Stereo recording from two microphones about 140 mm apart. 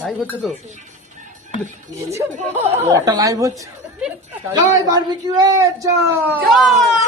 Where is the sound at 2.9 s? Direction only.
25° right (ahead or behind).